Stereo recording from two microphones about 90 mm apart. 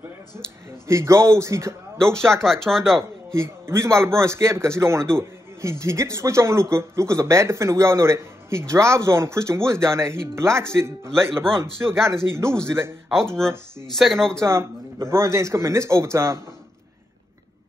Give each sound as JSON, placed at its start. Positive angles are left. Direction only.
{"t": 0.8, "sound": "a man's voice", "side_deg": -30}
{"t": 2.3, "sound": "speech", "side_deg": 5}
{"t": 3.3, "sound": "a man's voice", "side_deg": -30}
{"t": 11.1, "sound": "speech", "side_deg": 5}
{"t": 11.8, "sound": "a man's voice", "side_deg": -30}
{"t": 13.9, "sound": "speech", "side_deg": 5}
{"t": 14.4, "sound": "a man's voice", "side_deg": -30}